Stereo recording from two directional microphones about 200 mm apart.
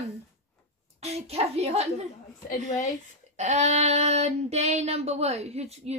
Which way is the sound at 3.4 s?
35° right (ahead or behind).